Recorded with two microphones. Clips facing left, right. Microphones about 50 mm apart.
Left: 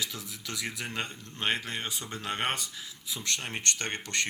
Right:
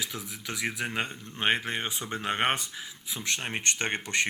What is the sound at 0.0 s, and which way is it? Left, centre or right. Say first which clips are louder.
Speech: right 1 dB; centre.